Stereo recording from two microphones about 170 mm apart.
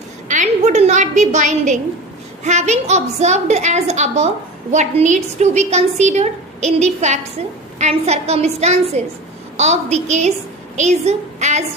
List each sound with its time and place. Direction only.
0.3 s a woman's voice: 45° right (ahead or behind)